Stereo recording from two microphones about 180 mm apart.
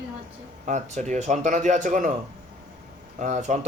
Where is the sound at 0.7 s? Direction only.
40° right (ahead or behind).